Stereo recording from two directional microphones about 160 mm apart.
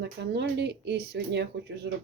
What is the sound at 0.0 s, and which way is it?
Speech, 90° right.